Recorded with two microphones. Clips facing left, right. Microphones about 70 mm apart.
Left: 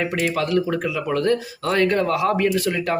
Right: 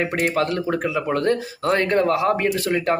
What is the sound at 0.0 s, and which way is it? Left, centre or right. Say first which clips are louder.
Speech: right 1 dB; right.